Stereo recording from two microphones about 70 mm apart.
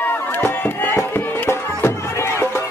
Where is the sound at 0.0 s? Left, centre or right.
Left.